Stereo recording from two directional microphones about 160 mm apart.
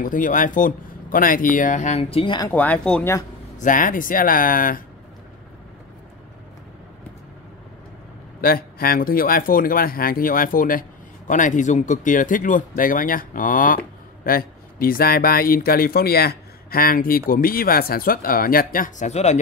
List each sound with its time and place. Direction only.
0.0 s a man's voice: 55° left (ahead or behind); by 2.5 s 30° left (ahead or behind)
2.5 s speech: 10° left (ahead or behind)
3.5 s a man's voice: 55° left (ahead or behind)
8.4 s a man's voice: 65° left (ahead or behind); by 19.4 s 45° left (ahead or behind)